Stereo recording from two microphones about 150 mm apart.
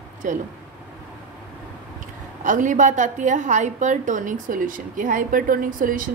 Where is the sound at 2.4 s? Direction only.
55° right (ahead or behind).